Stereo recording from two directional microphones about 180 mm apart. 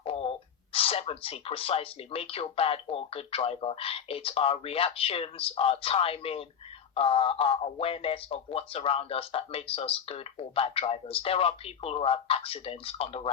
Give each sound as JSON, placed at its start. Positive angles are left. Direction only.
{"t": 0.0, "sound": "speech", "side_deg": 30}